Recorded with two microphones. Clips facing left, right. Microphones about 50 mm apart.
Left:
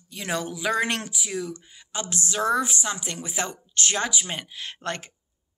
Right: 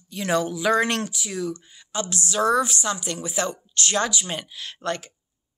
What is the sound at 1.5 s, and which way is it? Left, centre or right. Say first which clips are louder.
Speech: right 5 dB; left.